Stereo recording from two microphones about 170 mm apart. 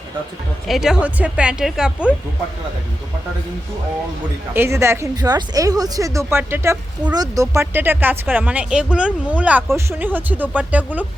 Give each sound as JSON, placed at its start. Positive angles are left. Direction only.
{"t": 0.7, "sound": "speech", "side_deg": -5}
{"t": 4.5, "sound": "speech", "side_deg": -15}